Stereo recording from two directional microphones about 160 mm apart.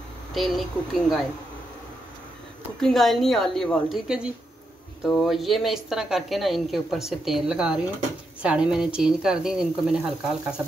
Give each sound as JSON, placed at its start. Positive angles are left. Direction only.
{"t": 0.3, "sound": "a woman's voice", "side_deg": 0}
{"t": 2.8, "sound": "a woman's voice", "side_deg": 0}